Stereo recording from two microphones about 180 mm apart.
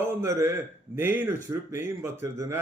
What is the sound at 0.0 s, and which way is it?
A man's voice, 15° right (ahead or behind).